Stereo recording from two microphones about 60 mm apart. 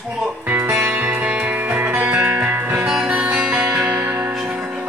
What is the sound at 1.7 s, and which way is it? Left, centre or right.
Music, right.